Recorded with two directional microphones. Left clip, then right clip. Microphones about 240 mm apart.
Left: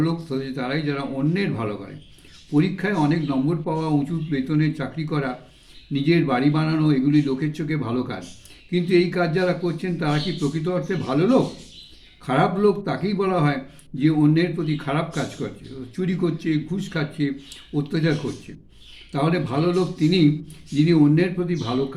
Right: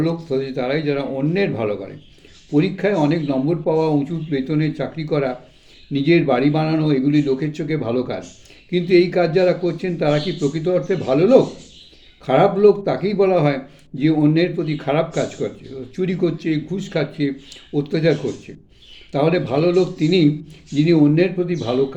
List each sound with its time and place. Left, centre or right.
0.0 s speech: centre
19.1 s speech: centre